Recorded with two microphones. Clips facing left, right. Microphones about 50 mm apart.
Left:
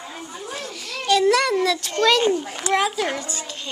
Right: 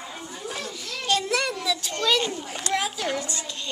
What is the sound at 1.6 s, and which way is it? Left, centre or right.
Speech, left.